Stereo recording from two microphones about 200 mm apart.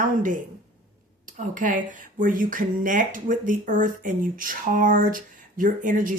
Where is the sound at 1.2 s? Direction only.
40° right (ahead or behind).